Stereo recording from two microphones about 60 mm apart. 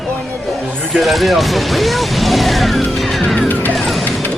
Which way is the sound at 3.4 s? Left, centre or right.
Left.